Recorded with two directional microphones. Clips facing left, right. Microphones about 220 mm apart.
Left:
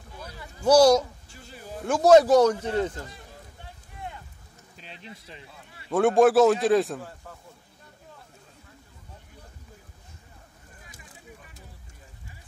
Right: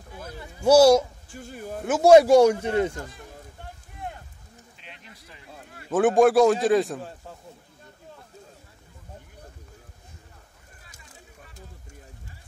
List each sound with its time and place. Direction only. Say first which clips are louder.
0.6 s a man's voice: right 2 dB; 10° right (ahead or behind)
1.3 s a sound: right 8 dB; 50° right (ahead or behind)
1.9 s a man's voice: right 2 dB; 10° right (ahead or behind)
4.7 s a sound: left 7 dB; 35° left (ahead or behind)
5.5 s speech: right 5 dB; 50° right (ahead or behind)
5.9 s a man's voice: right 1 dB; centre (ahead or behind)
7.0 s speech: right 2 dB; 20° right (ahead or behind)